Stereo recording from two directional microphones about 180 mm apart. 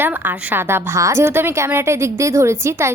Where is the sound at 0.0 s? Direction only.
10° right (ahead or behind).